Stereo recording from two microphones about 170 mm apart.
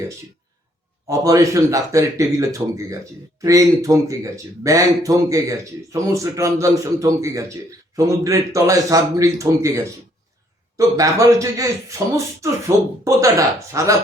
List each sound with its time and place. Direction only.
1.0 s speech: 20° right (ahead or behind)